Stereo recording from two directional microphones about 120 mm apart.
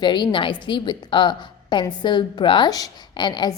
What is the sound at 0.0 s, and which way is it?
A woman's voice, 40° left (ahead or behind).